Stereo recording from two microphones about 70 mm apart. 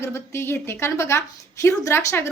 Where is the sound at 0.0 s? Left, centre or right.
Left.